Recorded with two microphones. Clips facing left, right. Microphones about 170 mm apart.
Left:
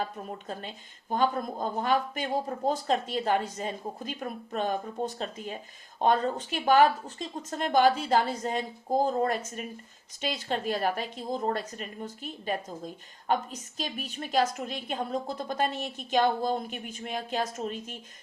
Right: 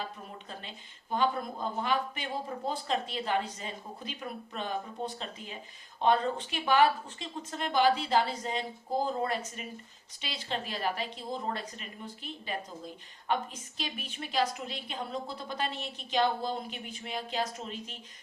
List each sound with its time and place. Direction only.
0.0 s speech: 45° left (ahead or behind)